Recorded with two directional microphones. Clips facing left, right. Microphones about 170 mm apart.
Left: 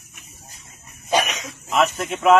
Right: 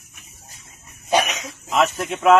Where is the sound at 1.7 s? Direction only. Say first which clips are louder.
Even; centre (ahead or behind).